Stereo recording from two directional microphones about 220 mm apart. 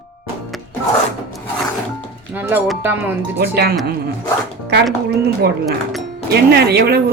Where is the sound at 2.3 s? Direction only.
10° right (ahead or behind).